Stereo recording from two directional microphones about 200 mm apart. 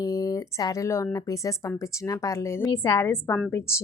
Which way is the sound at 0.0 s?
20° left (ahead or behind).